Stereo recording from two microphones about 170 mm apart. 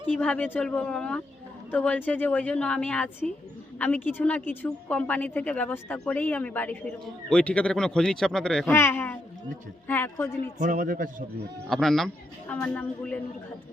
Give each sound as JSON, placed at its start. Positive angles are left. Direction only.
{"t": 0.1, "sound": "a woman's voice", "side_deg": 5}
{"t": 8.7, "sound": "a woman's voice", "side_deg": 15}
{"t": 10.6, "sound": "speech", "side_deg": -55}
{"t": 11.7, "sound": "a woman's voice", "side_deg": 0}